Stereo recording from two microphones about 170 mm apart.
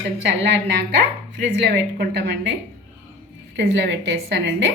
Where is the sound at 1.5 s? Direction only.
85° right.